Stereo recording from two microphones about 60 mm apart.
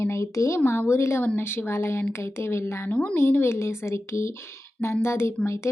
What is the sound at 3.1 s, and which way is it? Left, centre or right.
A woman's voice, left.